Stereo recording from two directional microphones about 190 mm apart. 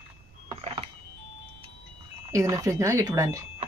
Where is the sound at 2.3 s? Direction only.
15° right (ahead or behind).